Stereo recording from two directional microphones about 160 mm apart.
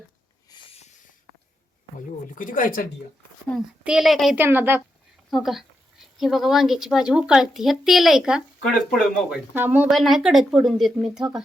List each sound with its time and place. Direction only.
0.5 s a sound: 25° left (ahead or behind)
2.3 s speech: 60° left (ahead or behind)
3.5 s speech: centre (ahead or behind)
4.4 s a woman's voice: 15° right (ahead or behind)
5.3 s a woman's voice: centre (ahead or behind)